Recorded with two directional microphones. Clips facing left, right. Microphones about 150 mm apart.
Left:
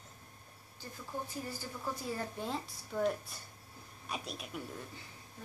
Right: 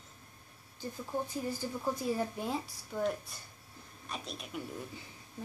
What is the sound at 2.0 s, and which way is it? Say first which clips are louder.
A woman's voice: right 4 dB; 10° right (ahead or behind).